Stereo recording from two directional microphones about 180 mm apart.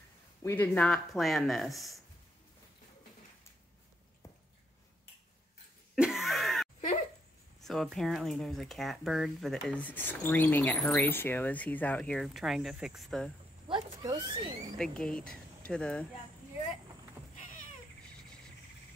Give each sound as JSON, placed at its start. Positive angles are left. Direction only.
{"t": 0.4, "sound": "speech", "side_deg": 15}
{"t": 5.9, "sound": "a sound", "side_deg": -5}
{"t": 7.6, "sound": "speech", "side_deg": 0}
{"t": 13.7, "sound": "speech", "side_deg": -25}
{"t": 14.8, "sound": "speech", "side_deg": 5}
{"t": 17.2, "sound": "cat", "side_deg": -10}